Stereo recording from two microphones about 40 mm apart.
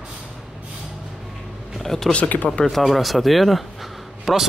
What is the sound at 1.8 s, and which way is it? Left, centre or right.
Speech, centre.